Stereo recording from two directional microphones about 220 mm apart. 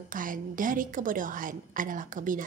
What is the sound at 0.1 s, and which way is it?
A woman's voice, 40° right (ahead or behind).